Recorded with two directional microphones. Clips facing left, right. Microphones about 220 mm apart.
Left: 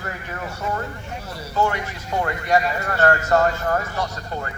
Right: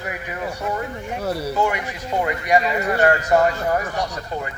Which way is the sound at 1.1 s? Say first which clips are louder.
Right 9 dB; 65° right (ahead or behind).